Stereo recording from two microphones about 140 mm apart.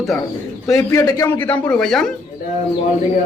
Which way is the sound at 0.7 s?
20° left (ahead or behind).